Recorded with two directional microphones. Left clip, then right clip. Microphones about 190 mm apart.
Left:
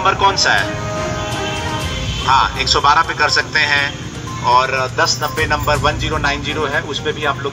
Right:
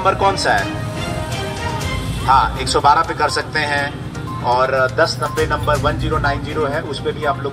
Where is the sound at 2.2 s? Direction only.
45° right (ahead or behind).